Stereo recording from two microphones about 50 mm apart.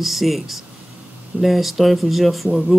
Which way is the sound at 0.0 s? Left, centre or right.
Centre.